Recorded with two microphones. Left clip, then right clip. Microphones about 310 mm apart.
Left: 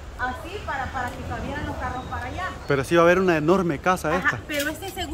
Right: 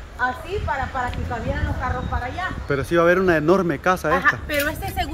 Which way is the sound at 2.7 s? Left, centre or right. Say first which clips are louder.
Even; centre.